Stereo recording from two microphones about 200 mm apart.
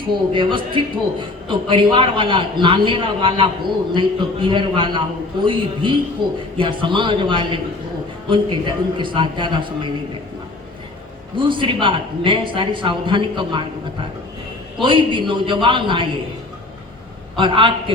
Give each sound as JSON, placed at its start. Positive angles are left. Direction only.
{"t": 0.3, "sound": "a man's voice", "side_deg": -25}
{"t": 11.3, "sound": "a man's voice", "side_deg": -25}
{"t": 14.8, "sound": "a man's voice", "side_deg": -25}
{"t": 17.3, "sound": "a man's voice", "side_deg": -25}